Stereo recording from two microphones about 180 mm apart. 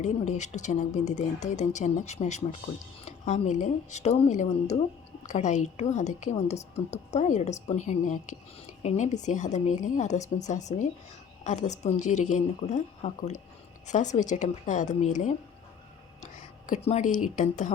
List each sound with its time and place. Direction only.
0.0 s a woman's voice: 40° left (ahead or behind)